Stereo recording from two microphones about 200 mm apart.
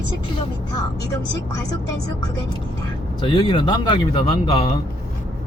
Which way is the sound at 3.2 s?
25° left (ahead or behind).